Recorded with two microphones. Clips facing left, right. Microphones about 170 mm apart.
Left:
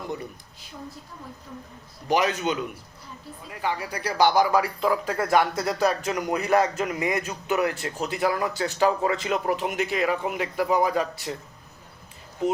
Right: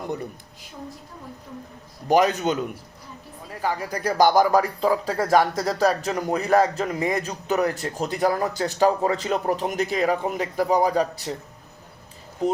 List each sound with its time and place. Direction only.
2.0 s a man's voice: 45° right (ahead or behind)
12.4 s speech: 40° right (ahead or behind)